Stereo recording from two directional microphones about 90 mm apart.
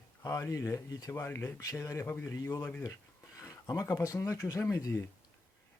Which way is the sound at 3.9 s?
40° left (ahead or behind).